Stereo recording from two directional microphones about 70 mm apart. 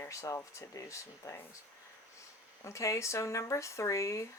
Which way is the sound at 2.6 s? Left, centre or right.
Left.